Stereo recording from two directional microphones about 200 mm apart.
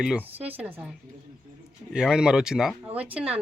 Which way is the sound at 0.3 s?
10° right (ahead or behind).